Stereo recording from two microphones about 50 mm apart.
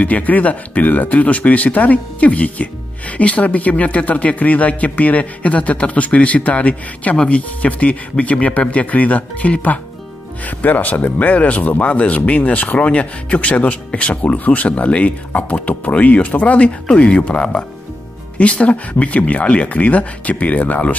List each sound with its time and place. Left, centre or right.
0.0 s speech: left